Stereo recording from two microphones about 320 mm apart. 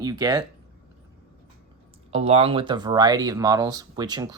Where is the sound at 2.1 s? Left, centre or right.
Centre.